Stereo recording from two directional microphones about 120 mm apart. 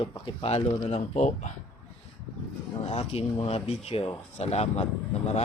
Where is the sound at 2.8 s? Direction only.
55° left (ahead or behind).